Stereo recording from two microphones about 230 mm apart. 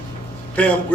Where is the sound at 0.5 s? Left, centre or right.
Centre.